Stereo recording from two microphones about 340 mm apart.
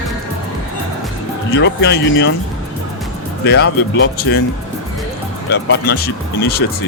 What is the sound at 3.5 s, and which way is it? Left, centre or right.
Speech, left.